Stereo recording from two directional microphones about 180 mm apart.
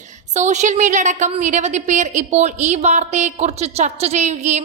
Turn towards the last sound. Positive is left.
turn(degrees=-40)  # may be behind; listen again after turning